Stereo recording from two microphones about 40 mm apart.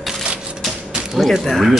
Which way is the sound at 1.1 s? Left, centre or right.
Centre.